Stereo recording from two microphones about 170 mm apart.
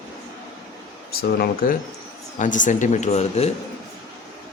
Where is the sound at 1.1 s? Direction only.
60° left (ahead or behind).